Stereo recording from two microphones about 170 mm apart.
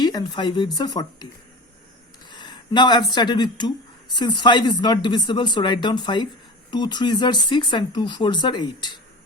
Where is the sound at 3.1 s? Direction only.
25° left (ahead or behind).